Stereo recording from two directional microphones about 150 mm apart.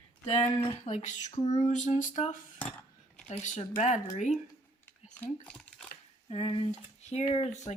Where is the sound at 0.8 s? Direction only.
50° left (ahead or behind).